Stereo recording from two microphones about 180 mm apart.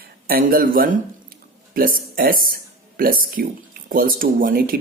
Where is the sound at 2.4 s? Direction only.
55° right (ahead or behind).